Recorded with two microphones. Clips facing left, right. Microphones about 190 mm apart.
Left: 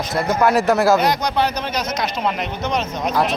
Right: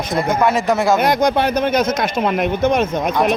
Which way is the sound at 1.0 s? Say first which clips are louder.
Right 4 dB; 50° right (ahead or behind).